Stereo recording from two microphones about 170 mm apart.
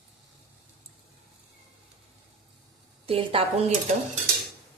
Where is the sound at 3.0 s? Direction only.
35° right (ahead or behind).